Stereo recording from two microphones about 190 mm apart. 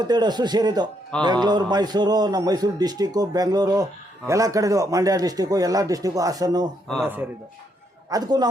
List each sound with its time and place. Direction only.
0.0 s a man's voice: 20° right (ahead or behind)
6.8 s speech: 5° left (ahead or behind)
8.1 s a man's voice: 20° right (ahead or behind)